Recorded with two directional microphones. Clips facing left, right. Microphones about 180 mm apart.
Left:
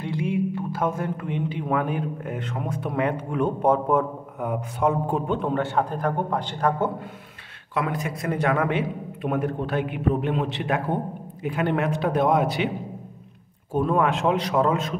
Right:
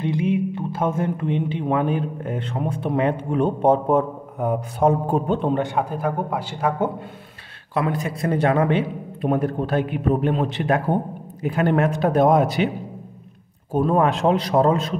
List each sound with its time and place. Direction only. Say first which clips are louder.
0.0 s speech: right 4 dB; 20° right (ahead or behind); by 5.5 s 35° right (ahead or behind)
5.5 s a man's voice: right 2 dB; 15° right (ahead or behind)
7.7 s a man's voice: right 3 dB; 30° right (ahead or behind)
13.7 s a man's voice: right 3 dB; 35° right (ahead or behind)